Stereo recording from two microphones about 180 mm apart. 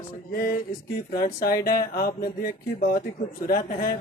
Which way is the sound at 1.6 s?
55° left (ahead or behind).